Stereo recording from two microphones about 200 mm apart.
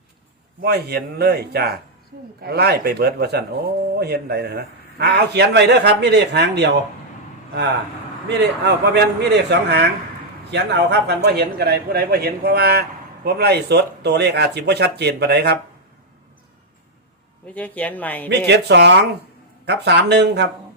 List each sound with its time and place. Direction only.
0.6 s a man's voice: 55° right (ahead or behind)
8.3 s a man's voice: 55° right (ahead or behind)
17.5 s speech: 5° left (ahead or behind)
18.3 s a man's voice: 60° right (ahead or behind)